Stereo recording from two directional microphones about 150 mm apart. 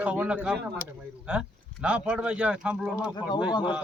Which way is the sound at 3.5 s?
30° left (ahead or behind).